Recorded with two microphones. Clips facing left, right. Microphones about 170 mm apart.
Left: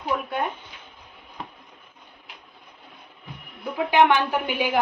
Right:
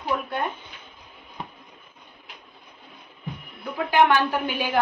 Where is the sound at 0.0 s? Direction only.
10° left (ahead or behind).